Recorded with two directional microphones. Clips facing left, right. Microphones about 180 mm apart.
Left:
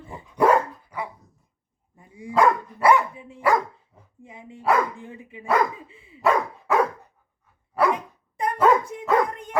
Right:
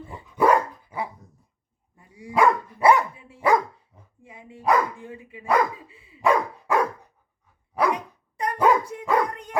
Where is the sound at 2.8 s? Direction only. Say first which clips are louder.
Even; 25° right (ahead or behind).